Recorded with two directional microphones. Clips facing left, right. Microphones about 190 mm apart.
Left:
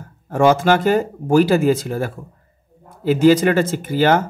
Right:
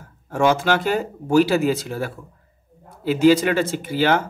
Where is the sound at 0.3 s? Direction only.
50° left (ahead or behind).